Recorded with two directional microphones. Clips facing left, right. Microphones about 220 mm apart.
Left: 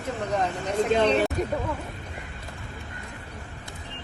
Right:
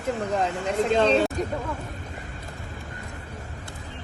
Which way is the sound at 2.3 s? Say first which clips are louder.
Right 2 dB; 40° right (ahead or behind).